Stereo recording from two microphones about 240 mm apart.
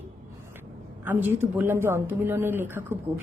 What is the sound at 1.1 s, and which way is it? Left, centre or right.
Speech, centre.